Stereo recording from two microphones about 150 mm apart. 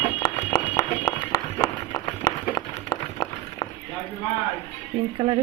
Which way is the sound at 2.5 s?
35° left (ahead or behind).